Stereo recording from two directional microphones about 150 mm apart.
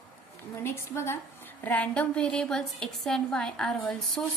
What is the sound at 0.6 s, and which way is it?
A woman's voice, 15° left (ahead or behind).